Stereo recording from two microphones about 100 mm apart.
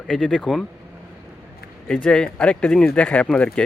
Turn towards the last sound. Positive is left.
turn(degrees=10)  # may be behind; listen again after turning